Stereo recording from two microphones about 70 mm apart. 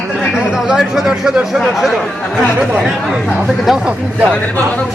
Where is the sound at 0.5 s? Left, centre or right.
Centre.